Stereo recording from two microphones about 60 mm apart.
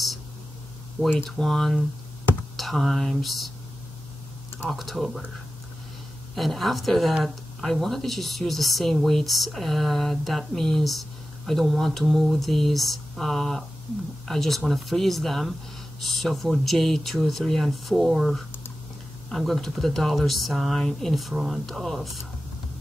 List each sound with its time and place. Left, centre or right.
1.0 s speech: right
1.3 s speech: centre
4.6 s speech: centre
6.3 s speech: centre